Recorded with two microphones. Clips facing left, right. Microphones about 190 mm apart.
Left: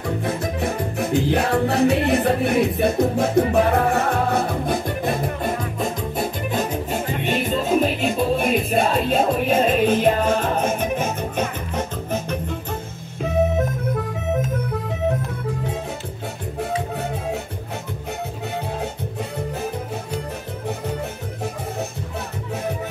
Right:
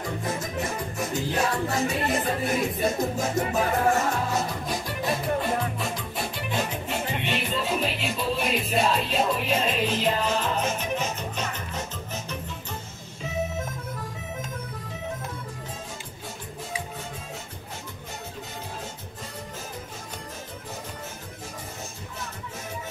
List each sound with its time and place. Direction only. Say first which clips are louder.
0.0 s music: left 6 dB; 60° left (ahead or behind)
16.5 s music: left 12 dB; 65° left (ahead or behind)